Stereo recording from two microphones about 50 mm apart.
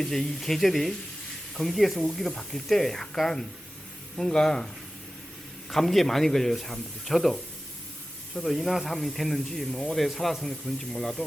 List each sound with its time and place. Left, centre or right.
0.0 s speech: centre
5.7 s speech: centre